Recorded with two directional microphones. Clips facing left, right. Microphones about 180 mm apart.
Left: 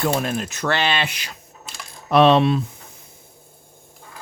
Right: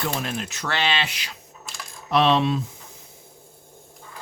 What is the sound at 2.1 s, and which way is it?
Coin, 55° left (ahead or behind).